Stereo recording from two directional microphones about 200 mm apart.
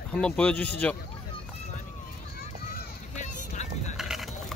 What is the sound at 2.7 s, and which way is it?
Run, 40° left (ahead or behind).